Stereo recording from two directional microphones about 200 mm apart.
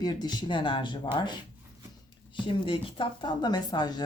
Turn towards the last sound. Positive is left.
turn(degrees=20)  # may be behind; listen again after turning